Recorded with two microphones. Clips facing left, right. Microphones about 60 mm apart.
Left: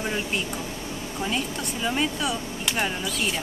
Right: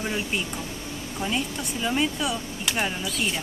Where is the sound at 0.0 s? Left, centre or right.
Centre.